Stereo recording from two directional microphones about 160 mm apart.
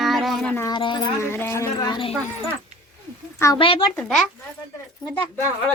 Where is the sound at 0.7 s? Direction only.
30° left (ahead or behind).